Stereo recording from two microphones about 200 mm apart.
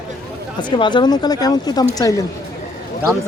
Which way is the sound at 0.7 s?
25° left (ahead or behind).